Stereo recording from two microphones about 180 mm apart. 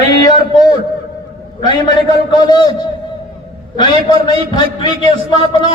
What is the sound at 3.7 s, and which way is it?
A man's voice, 25° left (ahead or behind).